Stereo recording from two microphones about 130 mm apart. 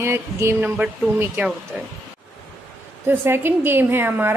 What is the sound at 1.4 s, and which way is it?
Speech, 15° right (ahead or behind).